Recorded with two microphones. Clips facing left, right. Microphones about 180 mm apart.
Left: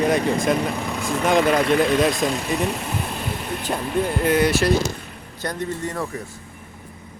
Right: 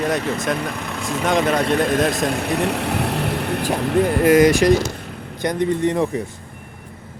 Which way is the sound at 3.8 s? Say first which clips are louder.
Right 5 dB; 70° right (ahead or behind).